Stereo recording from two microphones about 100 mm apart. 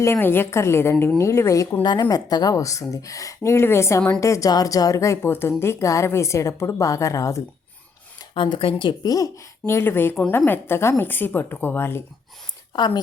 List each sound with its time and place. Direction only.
0.0 s a woman's voice: 25° left (ahead or behind)
1.8 s a woman's voice: 45° left (ahead or behind)
8.4 s speech: 60° left (ahead or behind)
9.0 s speech: 35° left (ahead or behind)
12.7 s speech: 50° left (ahead or behind)